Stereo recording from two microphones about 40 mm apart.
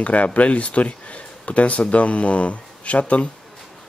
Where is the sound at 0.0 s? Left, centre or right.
Left.